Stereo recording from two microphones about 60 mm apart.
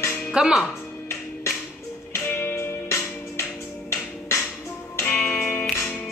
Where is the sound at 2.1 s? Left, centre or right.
Left.